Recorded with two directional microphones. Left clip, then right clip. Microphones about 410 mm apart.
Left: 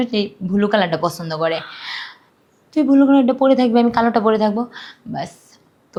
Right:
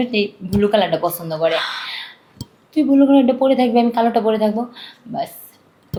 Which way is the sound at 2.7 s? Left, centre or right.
Centre.